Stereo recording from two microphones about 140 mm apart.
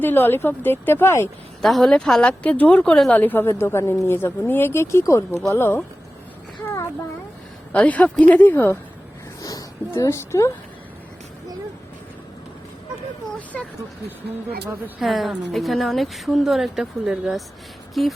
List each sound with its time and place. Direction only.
0.0 s a woman's voice: 15° left (ahead or behind)
1.6 s a woman's voice: 5° left (ahead or behind)
7.7 s a woman's voice: 10° left (ahead or behind)
9.4 s speech: 25° left (ahead or behind)
14.9 s a woman's voice: centre (ahead or behind)